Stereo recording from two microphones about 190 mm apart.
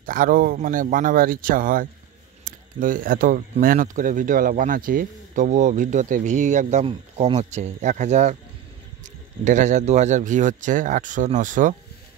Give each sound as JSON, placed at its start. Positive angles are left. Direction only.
{"t": 0.0, "sound": "speech", "side_deg": -45}